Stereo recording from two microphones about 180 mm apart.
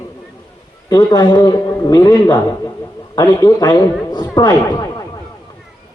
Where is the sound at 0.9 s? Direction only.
20° left (ahead or behind).